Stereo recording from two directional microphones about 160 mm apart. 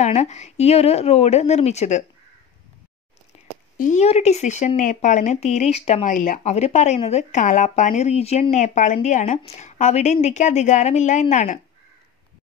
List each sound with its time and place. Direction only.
0.0 s speech: 45° left (ahead or behind)
3.7 s speech: 50° left (ahead or behind)